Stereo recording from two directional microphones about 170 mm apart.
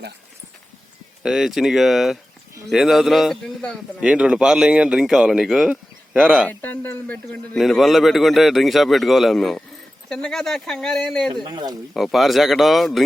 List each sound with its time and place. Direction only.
1.2 s a man's voice: centre (ahead or behind)
4.0 s a man's voice: 5° right (ahead or behind)
6.5 s a man's voice: 10° left (ahead or behind)
11.4 s speech: 25° right (ahead or behind)
11.9 s a man's voice: centre (ahead or behind)